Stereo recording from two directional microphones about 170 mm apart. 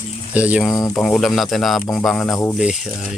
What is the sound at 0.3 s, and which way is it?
Speech, 5° right (ahead or behind).